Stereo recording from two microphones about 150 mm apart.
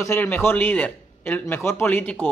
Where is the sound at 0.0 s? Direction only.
15° left (ahead or behind).